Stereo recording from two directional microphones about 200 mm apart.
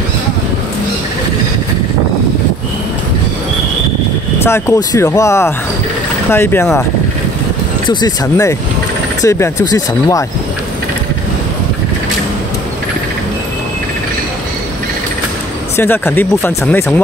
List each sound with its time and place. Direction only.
4.4 s speech: 15° left (ahead or behind)
7.9 s speech: 15° left (ahead or behind)
15.7 s speech: 10° left (ahead or behind)